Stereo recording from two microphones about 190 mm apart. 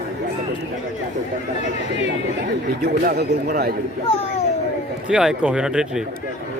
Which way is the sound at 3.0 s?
55° right (ahead or behind).